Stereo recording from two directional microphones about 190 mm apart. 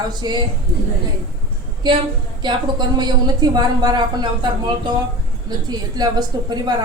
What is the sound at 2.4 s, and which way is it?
A woman's voice, 20° right (ahead or behind).